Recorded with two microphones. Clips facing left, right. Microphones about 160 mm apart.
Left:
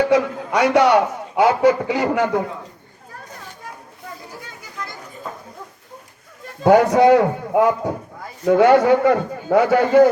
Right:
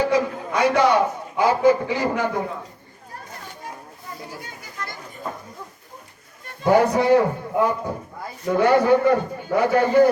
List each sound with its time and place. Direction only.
0.1 s a man's voice: 80° left
6.7 s a man's voice: 90° left